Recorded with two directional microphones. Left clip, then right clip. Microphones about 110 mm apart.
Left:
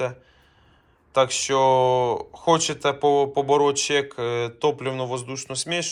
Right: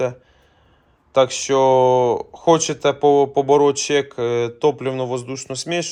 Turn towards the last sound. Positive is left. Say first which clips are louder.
# right 3 dB
turn(degrees=-60)  # may be behind; listen again after turning